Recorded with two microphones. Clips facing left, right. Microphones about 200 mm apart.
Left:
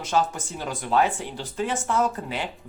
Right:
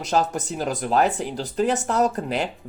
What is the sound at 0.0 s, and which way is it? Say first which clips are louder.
Speech: right 2 dB; 40° right (ahead or behind).